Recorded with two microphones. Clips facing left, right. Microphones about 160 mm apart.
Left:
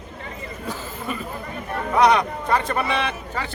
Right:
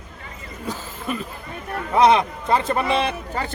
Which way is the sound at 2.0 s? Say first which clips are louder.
Right 2 dB; 25° right (ahead or behind).